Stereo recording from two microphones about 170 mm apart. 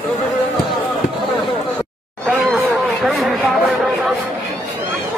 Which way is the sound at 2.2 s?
Centre (ahead or behind).